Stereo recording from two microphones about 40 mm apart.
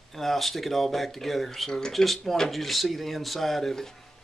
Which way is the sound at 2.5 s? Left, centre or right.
Centre.